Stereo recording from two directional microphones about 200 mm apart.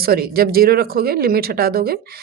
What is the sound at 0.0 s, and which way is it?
Speech, 50° right (ahead or behind).